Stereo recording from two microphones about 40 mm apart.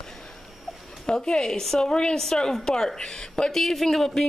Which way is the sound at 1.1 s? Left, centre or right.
Centre.